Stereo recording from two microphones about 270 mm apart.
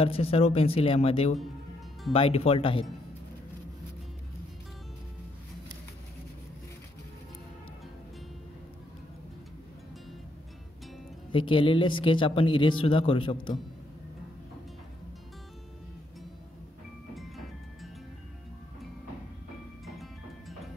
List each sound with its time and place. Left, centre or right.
0.0 s speech: left
11.3 s speech: centre